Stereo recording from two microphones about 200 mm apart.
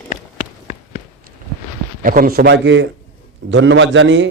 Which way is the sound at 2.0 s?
45° right (ahead or behind).